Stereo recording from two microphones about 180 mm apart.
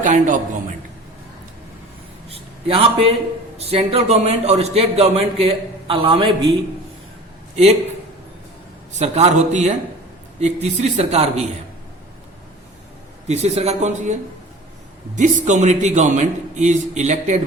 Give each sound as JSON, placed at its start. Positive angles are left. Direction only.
{"t": 0.0, "sound": "a man's voice", "side_deg": -45}
{"t": 2.3, "sound": "a sound", "side_deg": -30}
{"t": 3.6, "sound": "a man's voice", "side_deg": -35}
{"t": 7.5, "sound": "a man's voice", "side_deg": -35}
{"t": 9.0, "sound": "a man's voice", "side_deg": -40}
{"t": 13.2, "sound": "a man's voice", "side_deg": -40}